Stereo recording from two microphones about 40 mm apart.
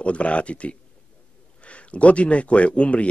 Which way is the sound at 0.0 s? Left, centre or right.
Left.